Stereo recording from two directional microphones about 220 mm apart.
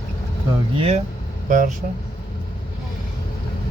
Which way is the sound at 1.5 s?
35° right (ahead or behind).